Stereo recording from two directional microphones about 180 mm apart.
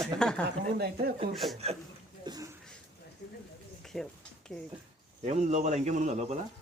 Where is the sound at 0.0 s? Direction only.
5° left (ahead or behind).